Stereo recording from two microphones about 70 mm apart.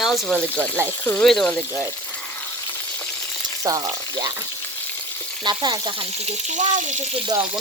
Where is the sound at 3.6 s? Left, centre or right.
Right.